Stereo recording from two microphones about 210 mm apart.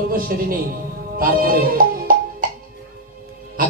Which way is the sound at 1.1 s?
45° right (ahead or behind).